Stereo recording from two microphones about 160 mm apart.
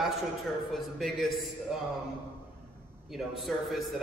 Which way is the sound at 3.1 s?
Centre (ahead or behind).